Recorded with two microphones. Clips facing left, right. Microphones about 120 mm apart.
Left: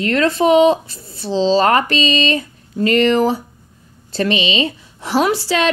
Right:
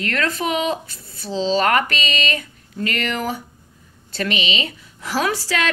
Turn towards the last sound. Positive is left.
turn(degrees=25)  # may be behind; listen again after turning